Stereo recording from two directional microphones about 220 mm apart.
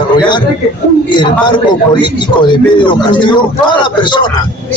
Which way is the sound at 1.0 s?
20° left (ahead or behind).